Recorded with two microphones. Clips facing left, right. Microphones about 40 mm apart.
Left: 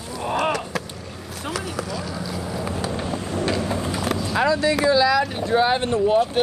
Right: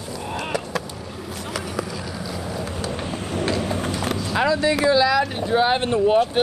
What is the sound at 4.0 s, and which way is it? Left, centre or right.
Vehicle, centre.